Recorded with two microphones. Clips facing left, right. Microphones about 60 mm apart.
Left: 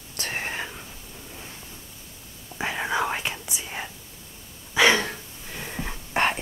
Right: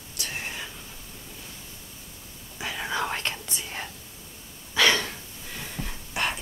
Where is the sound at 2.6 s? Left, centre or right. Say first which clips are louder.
Left 5 dB; left.